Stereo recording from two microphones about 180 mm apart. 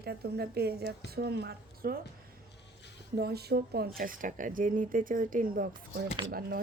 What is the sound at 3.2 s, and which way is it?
A woman's voice, 60° right (ahead or behind).